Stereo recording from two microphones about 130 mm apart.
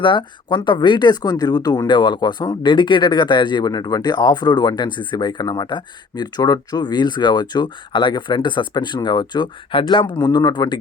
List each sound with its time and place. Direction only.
0.0 s speech: 40° left (ahead or behind)